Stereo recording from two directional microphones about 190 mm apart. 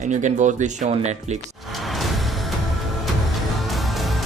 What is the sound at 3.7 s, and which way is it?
Music, centre (ahead or behind).